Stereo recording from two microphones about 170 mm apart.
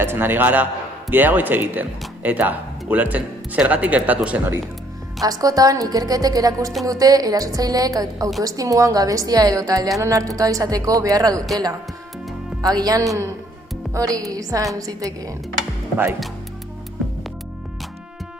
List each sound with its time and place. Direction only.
0.0 s speech: 10° right (ahead or behind)
5.2 s a woman's voice: 20° right (ahead or behind)
12.6 s a woman's voice: 20° right (ahead or behind)
17.0 s music: centre (ahead or behind)